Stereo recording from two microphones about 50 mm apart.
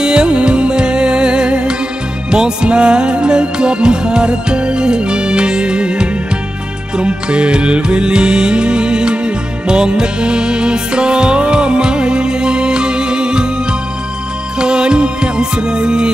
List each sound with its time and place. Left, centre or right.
0.0 s music: centre